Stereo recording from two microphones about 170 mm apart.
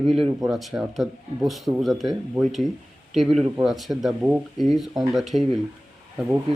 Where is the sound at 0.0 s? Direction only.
Centre (ahead or behind).